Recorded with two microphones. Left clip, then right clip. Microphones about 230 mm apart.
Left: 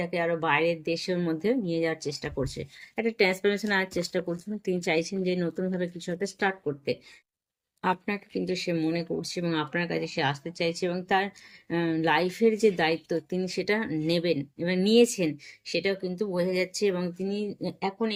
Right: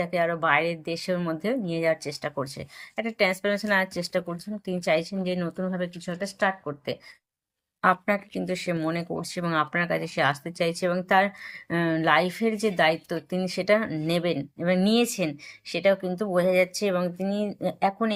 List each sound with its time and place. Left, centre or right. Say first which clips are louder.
0.0 s speech: right 3 dB; centre